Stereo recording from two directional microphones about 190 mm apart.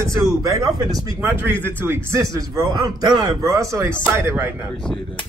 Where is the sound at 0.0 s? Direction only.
15° right (ahead or behind).